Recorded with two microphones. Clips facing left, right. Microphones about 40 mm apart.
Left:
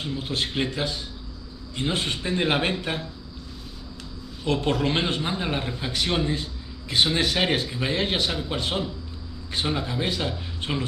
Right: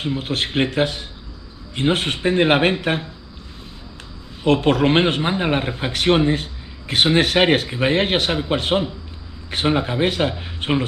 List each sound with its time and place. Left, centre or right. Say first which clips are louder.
0.0 s a man's voice: right 5 dB; right
4.4 s a man's voice: right 8 dB; right